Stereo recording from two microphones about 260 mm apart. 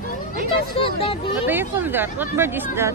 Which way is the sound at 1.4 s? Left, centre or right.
Centre.